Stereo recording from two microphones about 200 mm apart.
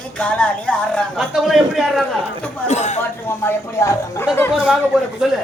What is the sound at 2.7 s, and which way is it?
Speech, 35° left (ahead or behind).